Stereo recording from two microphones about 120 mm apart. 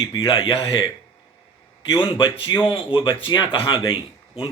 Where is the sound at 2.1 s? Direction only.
45° left (ahead or behind).